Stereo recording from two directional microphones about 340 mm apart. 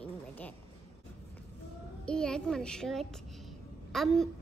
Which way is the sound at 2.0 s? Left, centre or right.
Centre.